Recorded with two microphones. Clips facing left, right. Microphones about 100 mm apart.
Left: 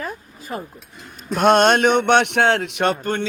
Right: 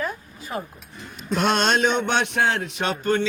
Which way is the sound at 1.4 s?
50° left (ahead or behind).